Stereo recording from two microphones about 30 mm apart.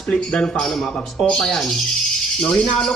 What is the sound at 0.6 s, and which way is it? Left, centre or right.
Speech, centre.